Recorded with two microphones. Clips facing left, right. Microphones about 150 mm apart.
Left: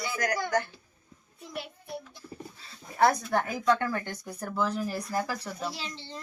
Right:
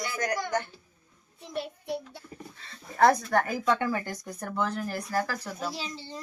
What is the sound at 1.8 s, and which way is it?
Speech, 90° right.